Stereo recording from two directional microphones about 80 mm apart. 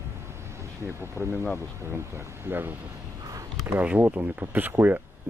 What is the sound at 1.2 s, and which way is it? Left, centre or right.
Speech, left.